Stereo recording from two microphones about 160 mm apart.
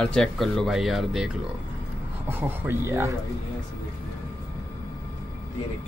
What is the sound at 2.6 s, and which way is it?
Speech, 15° right (ahead or behind).